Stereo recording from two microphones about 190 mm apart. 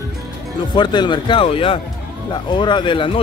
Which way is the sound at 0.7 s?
25° left (ahead or behind).